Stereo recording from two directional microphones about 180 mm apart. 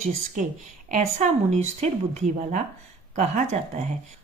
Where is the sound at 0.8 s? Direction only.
45° right (ahead or behind).